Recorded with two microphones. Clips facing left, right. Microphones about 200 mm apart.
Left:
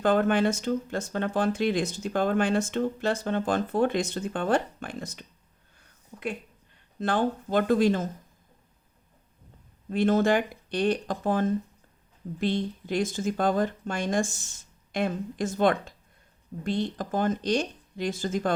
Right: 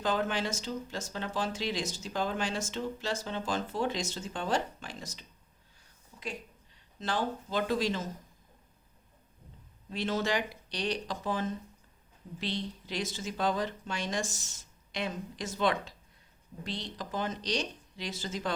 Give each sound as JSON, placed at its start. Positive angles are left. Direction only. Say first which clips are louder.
{"t": 0.0, "sound": "speech", "louder": "left 9 dB", "side_deg": 55}
{"t": 5.8, "sound": "a sound", "louder": "left 8 dB", "side_deg": 60}
{"t": 7.0, "sound": "speech", "louder": "left 7 dB", "side_deg": 55}
{"t": 9.9, "sound": "speech", "louder": "left 9 dB", "side_deg": 50}